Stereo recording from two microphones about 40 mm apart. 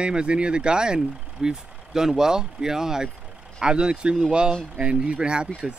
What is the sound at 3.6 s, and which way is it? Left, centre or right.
Speech, right.